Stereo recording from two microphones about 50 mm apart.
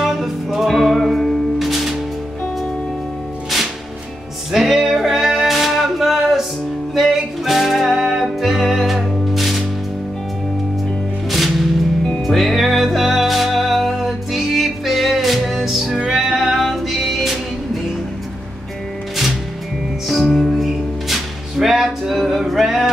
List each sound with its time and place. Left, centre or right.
0.0 s music: centre
4.5 s music: centre
11.2 s music: centre
20.1 s music: centre